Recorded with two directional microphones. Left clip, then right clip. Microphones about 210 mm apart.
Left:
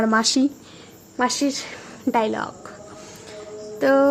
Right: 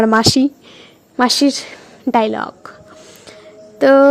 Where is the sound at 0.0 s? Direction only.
40° right (ahead or behind).